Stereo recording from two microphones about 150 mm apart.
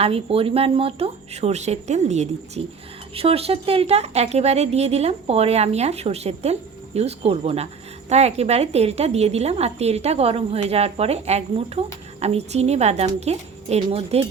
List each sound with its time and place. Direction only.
0.0 s speech: 40° right (ahead or behind)